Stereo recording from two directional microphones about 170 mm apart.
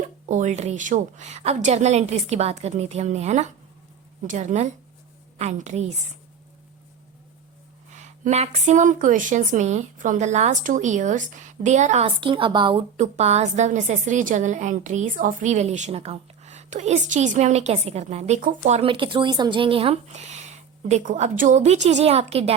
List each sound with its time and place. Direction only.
0.3 s a woman's voice: 45° right (ahead or behind)
7.9 s speech: 45° right (ahead or behind)